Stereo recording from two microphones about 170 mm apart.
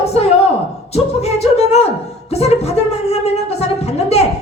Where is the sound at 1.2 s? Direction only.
40° left (ahead or behind).